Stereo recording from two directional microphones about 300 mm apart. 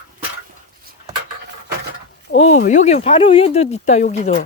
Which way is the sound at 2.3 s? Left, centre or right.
Left.